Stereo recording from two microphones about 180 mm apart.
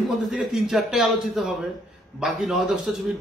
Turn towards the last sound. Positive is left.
turn(degrees=0)  # may be behind; listen again after turning